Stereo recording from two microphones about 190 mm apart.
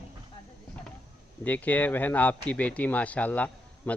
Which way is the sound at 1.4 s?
10° left (ahead or behind).